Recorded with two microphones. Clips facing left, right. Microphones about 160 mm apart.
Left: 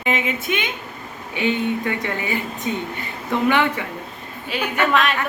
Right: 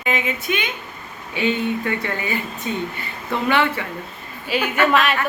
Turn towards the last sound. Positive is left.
turn(degrees=0)  # may be behind; listen again after turning